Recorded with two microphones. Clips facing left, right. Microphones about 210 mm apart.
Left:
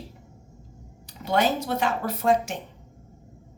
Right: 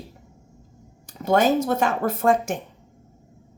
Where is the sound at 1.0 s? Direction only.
45° right (ahead or behind).